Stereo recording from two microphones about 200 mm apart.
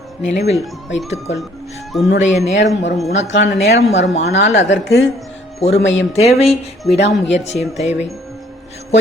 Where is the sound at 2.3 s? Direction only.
35° left (ahead or behind).